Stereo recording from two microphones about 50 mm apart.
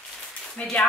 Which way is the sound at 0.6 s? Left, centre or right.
Left.